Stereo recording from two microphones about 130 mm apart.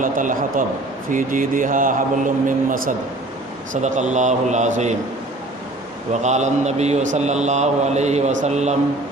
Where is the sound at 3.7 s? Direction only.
65° right (ahead or behind).